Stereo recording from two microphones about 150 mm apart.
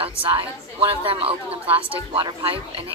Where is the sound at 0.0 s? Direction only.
35° right (ahead or behind).